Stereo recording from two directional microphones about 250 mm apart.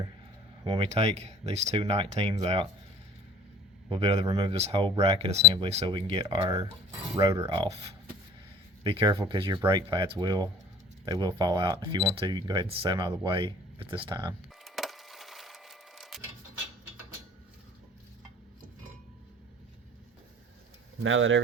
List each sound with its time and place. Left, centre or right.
0.6 s speech: right
3.8 s speech: right
14.6 s wood: centre
21.0 s speech: right